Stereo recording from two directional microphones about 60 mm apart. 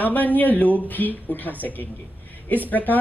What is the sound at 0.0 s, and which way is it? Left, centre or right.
Speech, left.